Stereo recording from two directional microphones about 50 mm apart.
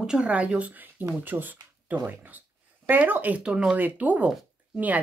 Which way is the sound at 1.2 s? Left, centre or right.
Right.